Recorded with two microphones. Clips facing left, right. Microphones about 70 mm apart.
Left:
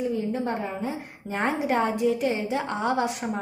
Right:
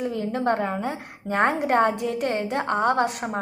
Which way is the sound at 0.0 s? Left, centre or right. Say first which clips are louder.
Right 2 dB; right.